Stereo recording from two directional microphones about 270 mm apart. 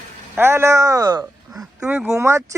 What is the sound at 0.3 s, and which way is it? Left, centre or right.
Speech, centre.